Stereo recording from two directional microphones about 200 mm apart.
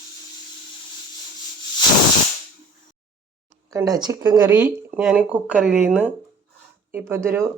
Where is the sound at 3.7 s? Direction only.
20° right (ahead or behind).